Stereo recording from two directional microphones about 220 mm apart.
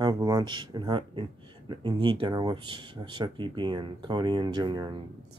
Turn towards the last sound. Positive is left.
turn(degrees=-20)  # may be behind; listen again after turning